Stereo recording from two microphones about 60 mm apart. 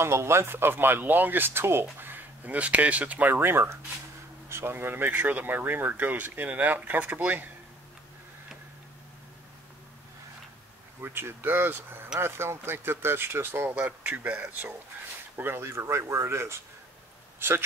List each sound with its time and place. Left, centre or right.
0.0 s speech: right
11.0 s speech: right
13.7 s speech: right
15.3 s speech: right
17.4 s speech: right